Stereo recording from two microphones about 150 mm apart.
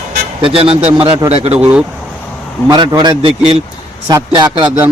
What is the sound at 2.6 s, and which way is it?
Speech, 30° right (ahead or behind).